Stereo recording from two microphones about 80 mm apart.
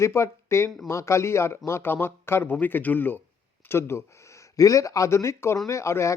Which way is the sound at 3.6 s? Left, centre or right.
Left.